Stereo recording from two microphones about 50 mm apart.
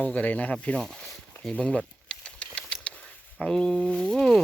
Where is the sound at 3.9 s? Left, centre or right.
Left.